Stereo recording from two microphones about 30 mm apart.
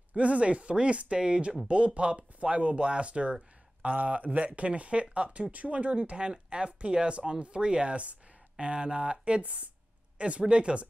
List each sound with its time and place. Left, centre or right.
0.1 s speech: right
3.9 s speech: right
5.9 s speech: right
7.9 s speech: right
8.5 s speech: right
9.4 s speech: right